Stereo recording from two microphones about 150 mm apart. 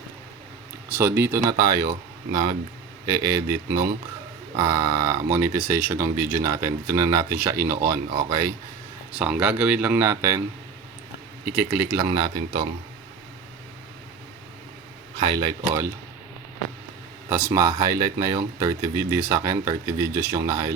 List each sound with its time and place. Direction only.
0.9 s speech: 15° right (ahead or behind)
9.1 s speech: 10° right (ahead or behind)
11.4 s speech: 10° right (ahead or behind)
12.1 s speech: 30° right (ahead or behind)
17.2 s speech: 20° right (ahead or behind)